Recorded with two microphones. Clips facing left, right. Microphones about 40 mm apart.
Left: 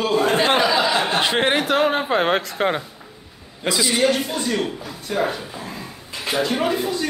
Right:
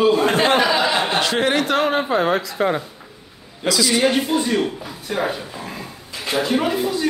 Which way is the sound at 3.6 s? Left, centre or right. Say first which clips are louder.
Right 2 dB; left.